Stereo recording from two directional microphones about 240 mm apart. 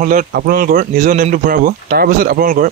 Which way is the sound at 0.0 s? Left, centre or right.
Right.